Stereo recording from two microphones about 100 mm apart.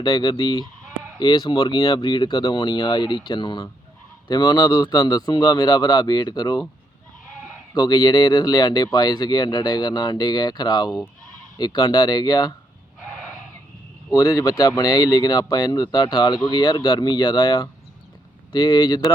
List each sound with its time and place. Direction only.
0.0 s speech: 50° left (ahead or behind)
7.7 s speech: 45° left (ahead or behind)
14.1 s speech: 35° left (ahead or behind)